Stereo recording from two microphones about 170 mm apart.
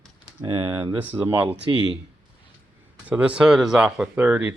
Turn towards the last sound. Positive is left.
turn(degrees=-10)  # may be behind; listen again after turning